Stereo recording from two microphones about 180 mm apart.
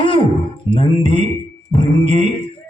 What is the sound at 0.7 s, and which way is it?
Speech, 30° left (ahead or behind).